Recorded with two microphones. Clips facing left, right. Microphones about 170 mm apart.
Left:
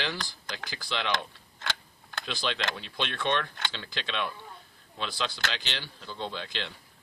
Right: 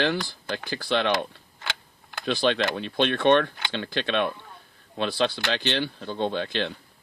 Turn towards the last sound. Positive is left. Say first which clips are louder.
# right 9 dB
turn(degrees=-60)  # may be behind; listen again after turning